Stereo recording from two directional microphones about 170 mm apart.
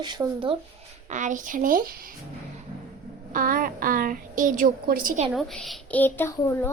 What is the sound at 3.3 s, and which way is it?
A woman's voice, 55° right (ahead or behind).